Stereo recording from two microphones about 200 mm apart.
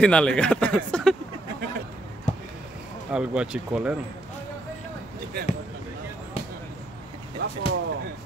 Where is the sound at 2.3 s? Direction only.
35° left (ahead or behind).